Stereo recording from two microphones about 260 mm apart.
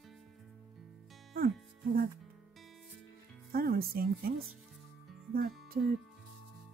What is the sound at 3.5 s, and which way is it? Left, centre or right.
Speech, right.